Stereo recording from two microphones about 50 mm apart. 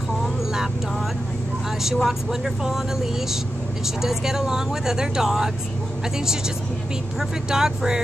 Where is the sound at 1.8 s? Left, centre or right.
Centre.